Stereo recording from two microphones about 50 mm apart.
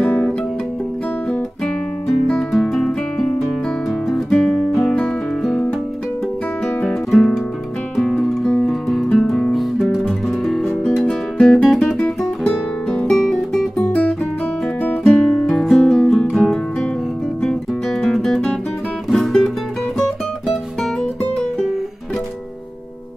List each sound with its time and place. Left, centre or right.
0.0 s music: left
2.0 s guitar: centre
4.4 s music: centre
6.9 s music: centre
8.6 s music: centre
12.4 s music: left
13.1 s guitar: centre
15.0 s music: centre
17.4 s guitar: centre
19.1 s music: centre